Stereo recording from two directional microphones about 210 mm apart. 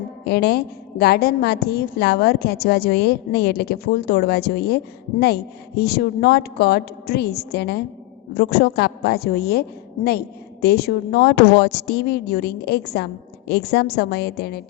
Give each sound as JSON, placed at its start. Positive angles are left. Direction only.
{"t": 0.3, "sound": "a woman's voice", "side_deg": 50}